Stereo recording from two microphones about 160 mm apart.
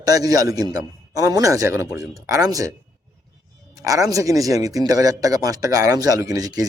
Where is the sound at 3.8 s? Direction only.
20° right (ahead or behind).